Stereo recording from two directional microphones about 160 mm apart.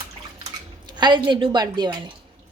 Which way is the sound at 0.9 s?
30° right (ahead or behind).